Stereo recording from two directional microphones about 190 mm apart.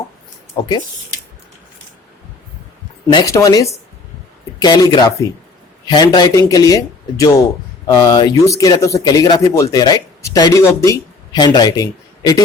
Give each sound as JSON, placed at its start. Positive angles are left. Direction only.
{"t": 3.1, "sound": "speech", "side_deg": 20}